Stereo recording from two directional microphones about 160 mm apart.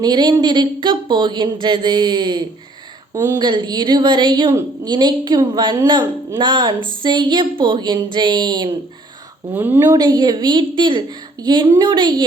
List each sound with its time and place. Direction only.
0.0 s a woman's voice: 25° right (ahead or behind)
9.6 s a woman's voice: 15° right (ahead or behind)
10.0 s a woman's voice: 25° right (ahead or behind)